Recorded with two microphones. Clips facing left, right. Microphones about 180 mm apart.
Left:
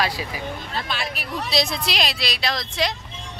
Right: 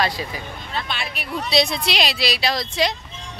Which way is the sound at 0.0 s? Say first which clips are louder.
Right 1 dB; 10° left (ahead or behind).